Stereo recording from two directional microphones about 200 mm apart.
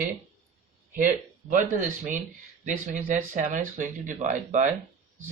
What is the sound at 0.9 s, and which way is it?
Speech, 40° right (ahead or behind).